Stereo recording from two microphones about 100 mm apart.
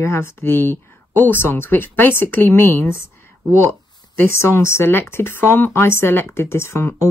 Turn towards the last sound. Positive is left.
turn(degrees=25)  # may be behind; listen again after turning